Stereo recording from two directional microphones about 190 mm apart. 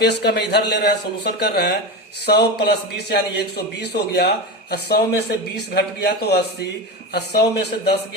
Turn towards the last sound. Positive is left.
turn(degrees=60)  # may be behind; listen again after turning